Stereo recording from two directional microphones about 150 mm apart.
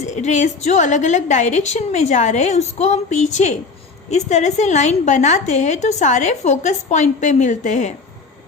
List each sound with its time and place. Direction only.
0.0 s a woman's voice: 50° left (ahead or behind)